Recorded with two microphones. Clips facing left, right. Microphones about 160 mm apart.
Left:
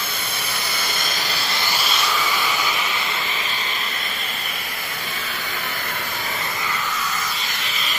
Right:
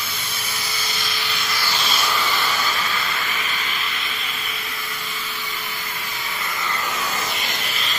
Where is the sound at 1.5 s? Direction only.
20° left (ahead or behind).